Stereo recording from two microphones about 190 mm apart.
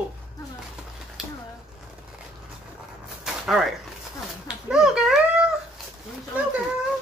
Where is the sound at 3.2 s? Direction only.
5° right (ahead or behind).